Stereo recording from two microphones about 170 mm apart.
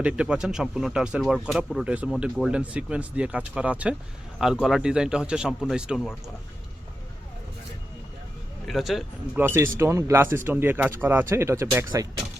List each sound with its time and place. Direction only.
0.0 s speech: 5° right (ahead or behind)
8.6 s speech: centre (ahead or behind)
9.4 s speech: 15° right (ahead or behind)